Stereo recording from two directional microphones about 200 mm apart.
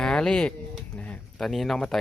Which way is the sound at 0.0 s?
5° left (ahead or behind).